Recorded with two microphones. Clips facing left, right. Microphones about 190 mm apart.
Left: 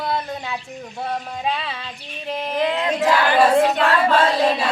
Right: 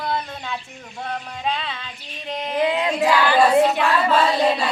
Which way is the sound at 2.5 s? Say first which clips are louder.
Right 1 dB; 15° right (ahead or behind).